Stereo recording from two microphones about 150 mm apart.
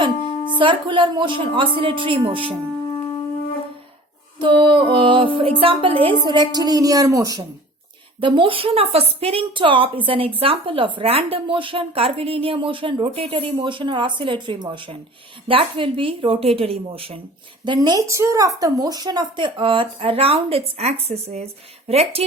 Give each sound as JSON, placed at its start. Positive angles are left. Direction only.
{"t": 0.3, "sound": "music", "side_deg": 45}
{"t": 0.5, "sound": "a woman's voice", "side_deg": -35}
{"t": 2.9, "sound": "wind instrument", "side_deg": 30}
{"t": 4.4, "sound": "a woman's voice", "side_deg": -30}
{"t": 8.2, "sound": "a woman's voice", "side_deg": -35}
{"t": 17.7, "sound": "a woman's voice", "side_deg": -25}